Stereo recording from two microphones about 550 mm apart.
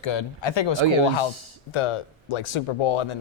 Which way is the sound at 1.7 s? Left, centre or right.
Left.